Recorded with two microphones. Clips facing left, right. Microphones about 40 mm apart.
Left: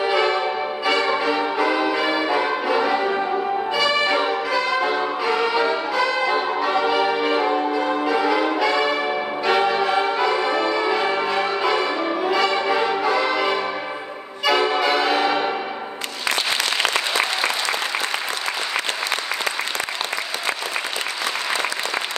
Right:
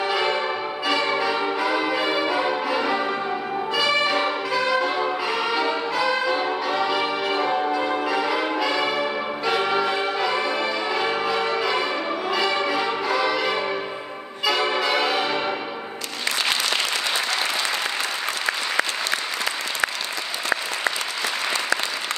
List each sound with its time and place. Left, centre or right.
0.3 s music: centre
2.0 s change ringing: centre
2.2 s music: centre
5.0 s music: centre
5.5 s brass instrument: centre
6.6 s music: centre
7.0 s music: centre
7.2 s music: centre
7.5 s change ringing: centre
9.5 s music: centre
10.4 s brass instrument: left
11.2 s change ringing: centre
12.8 s music: left
14.4 s music: centre